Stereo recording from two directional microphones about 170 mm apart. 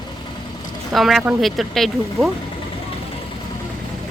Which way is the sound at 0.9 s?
Centre (ahead or behind).